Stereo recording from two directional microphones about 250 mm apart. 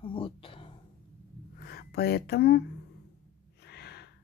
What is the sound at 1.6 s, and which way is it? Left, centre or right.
Speech, left.